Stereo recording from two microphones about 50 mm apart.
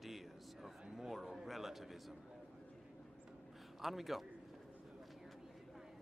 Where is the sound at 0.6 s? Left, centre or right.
Centre.